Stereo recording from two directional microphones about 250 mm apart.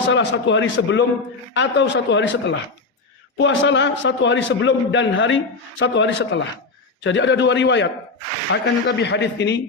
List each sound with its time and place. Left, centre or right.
0.1 s a man's voice: left